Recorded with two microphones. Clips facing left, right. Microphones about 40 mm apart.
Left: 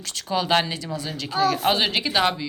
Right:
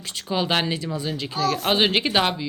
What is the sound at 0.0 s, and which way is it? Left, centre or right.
Speech, right.